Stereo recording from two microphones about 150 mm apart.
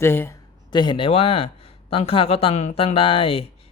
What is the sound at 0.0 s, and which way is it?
Speech, 15° left (ahead or behind).